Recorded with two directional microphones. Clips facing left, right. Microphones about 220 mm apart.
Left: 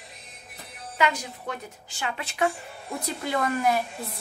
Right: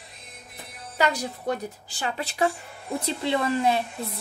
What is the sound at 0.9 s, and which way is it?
A woman's voice, 35° right (ahead or behind).